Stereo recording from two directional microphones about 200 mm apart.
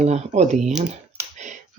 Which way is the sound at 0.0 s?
35° right (ahead or behind).